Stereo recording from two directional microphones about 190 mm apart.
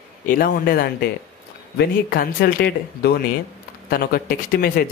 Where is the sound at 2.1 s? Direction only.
50° left (ahead or behind).